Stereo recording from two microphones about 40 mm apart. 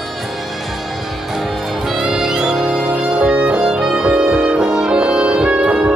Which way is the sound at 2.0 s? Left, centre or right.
Right.